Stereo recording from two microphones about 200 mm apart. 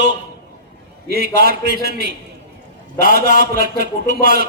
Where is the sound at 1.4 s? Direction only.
55° right (ahead or behind).